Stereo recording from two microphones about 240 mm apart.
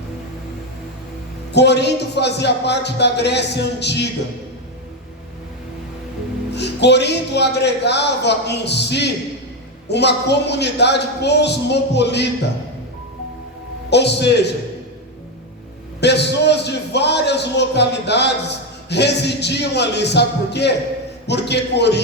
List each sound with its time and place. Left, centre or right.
1.5 s speech: left
6.6 s speech: left
13.9 s speech: left
16.0 s speech: left